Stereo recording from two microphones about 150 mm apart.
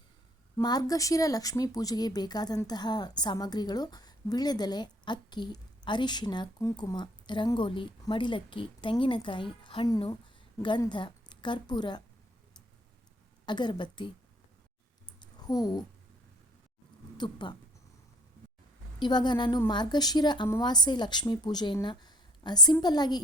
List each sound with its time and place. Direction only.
0.6 s a woman's voice: 25° left (ahead or behind)
13.4 s speech: 30° left (ahead or behind)
15.2 s a sound: 25° left (ahead or behind)
17.2 s speech: 30° left (ahead or behind)
18.9 s a woman's voice: 30° left (ahead or behind)